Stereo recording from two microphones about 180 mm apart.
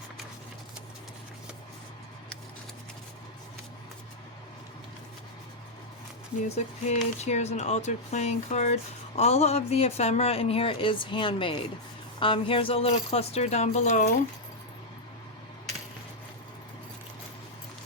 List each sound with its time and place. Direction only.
6.8 s speech: 40° left (ahead or behind)